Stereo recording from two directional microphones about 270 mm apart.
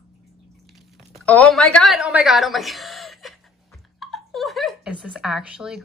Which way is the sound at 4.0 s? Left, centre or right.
Centre.